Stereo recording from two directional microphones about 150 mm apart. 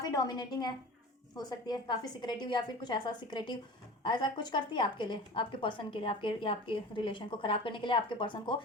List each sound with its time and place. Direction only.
0.0 s a woman's voice: 25° left (ahead or behind)